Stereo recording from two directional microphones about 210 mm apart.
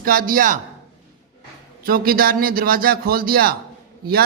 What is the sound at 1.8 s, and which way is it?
A man's voice, 45° right (ahead or behind).